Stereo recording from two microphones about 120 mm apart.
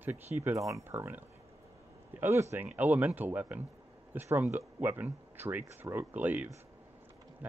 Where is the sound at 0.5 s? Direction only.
25° right (ahead or behind).